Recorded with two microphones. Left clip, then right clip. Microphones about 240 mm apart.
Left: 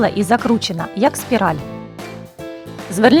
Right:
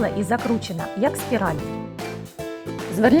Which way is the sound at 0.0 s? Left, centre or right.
Centre.